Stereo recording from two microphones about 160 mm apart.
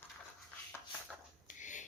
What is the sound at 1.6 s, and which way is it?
Filing, 50° left (ahead or behind).